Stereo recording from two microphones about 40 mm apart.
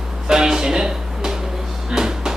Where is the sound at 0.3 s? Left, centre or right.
Centre.